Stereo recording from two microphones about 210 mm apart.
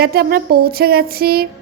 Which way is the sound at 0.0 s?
45° right (ahead or behind).